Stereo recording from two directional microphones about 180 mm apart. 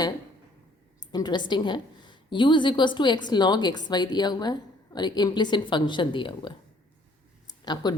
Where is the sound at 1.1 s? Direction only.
25° left (ahead or behind).